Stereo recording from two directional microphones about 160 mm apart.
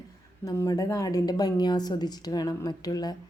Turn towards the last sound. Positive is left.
turn(degrees=25)  # may be behind; listen again after turning